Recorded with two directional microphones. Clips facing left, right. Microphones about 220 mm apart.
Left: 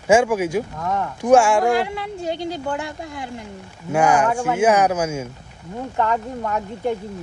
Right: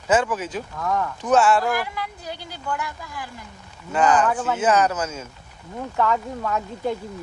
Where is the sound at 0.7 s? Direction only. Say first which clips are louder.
Left 1 dB; 20° left (ahead or behind).